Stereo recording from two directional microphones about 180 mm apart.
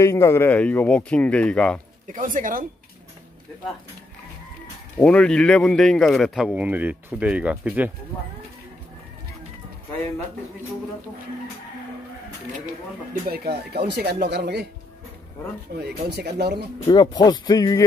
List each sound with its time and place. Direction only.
0.0 s speech: 15° left (ahead or behind)
2.0 s speech: 45° right (ahead or behind)
4.9 s a man's voice: 5° left (ahead or behind)
13.3 s speech: 60° right (ahead or behind)
15.8 s speech: 65° right (ahead or behind)
16.8 s speech: 25° left (ahead or behind)